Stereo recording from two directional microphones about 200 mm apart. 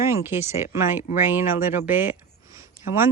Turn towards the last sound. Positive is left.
turn(degrees=-10)  # may be behind; listen again after turning